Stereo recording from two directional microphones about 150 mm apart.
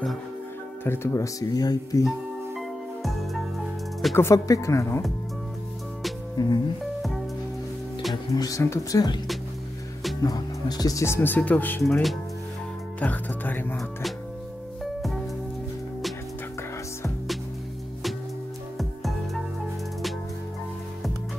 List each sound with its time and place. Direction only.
0.8 s speech: 15° left (ahead or behind)
2.0 s music: centre (ahead or behind)
4.1 s speech: 20° left (ahead or behind)
6.4 s speech: 25° left (ahead or behind)
6.8 s music: centre (ahead or behind)
8.4 s speech: 20° left (ahead or behind)
10.2 s speech: 25° left (ahead or behind); by 11.8 s 10° left (ahead or behind)
11.8 s speech: centre (ahead or behind)
13.0 s speech: 10° left (ahead or behind)
14.8 s music: centre (ahead or behind)
18.8 s music: centre (ahead or behind)